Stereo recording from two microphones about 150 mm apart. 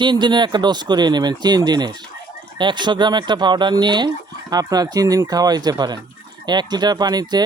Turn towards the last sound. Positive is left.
turn(degrees=-25)  # may be behind; listen again after turning